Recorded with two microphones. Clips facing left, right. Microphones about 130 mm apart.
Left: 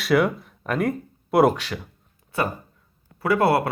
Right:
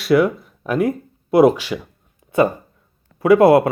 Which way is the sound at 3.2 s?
20° right (ahead or behind).